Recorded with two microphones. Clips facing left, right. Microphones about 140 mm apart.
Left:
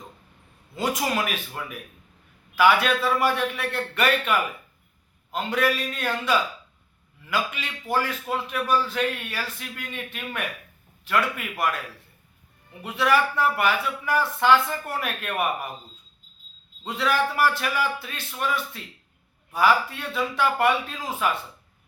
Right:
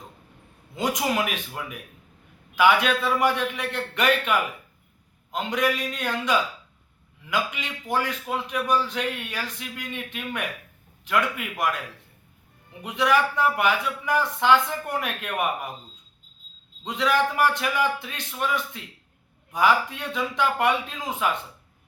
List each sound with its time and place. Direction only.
0.8 s a man's voice: 15° right (ahead or behind)
7.3 s a man's voice: 15° right (ahead or behind)
12.8 s a man's voice: 15° right (ahead or behind)
16.8 s a man's voice: 15° right (ahead or behind)